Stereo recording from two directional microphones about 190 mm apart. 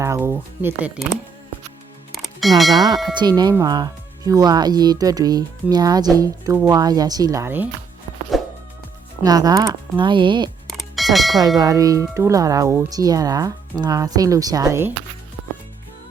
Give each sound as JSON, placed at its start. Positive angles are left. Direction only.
{"t": 0.0, "sound": "speech", "side_deg": -15}
{"t": 2.1, "sound": "music", "side_deg": 0}
{"t": 3.2, "sound": "speech", "side_deg": -20}
{"t": 9.2, "sound": "speech", "side_deg": -20}
{"t": 10.7, "sound": "music", "side_deg": 0}
{"t": 11.3, "sound": "speech", "side_deg": -20}